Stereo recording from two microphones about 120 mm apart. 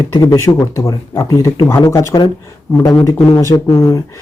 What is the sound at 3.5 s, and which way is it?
Speech, 25° left (ahead or behind).